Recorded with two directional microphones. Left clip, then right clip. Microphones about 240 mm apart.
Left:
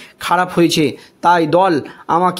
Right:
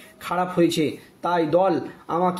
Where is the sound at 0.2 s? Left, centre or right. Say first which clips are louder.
Left 8 dB; left.